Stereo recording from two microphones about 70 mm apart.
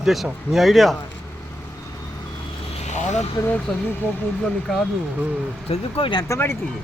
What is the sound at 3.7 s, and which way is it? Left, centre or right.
Speech, centre.